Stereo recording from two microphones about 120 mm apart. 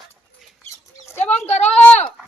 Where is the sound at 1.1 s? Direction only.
20° left (ahead or behind).